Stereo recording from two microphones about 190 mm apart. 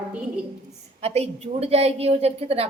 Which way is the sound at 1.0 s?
30° right (ahead or behind).